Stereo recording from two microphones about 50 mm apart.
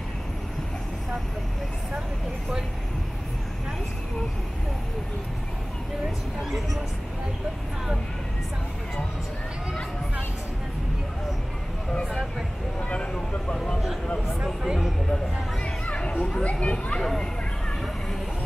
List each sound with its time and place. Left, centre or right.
12.1 s speech: centre
12.9 s speech: centre
14.4 s speech: centre
15.6 s children playing: left
16.4 s speech: left
17.0 s speech: centre